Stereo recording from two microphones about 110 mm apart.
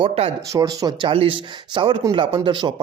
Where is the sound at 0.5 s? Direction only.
30° right (ahead or behind).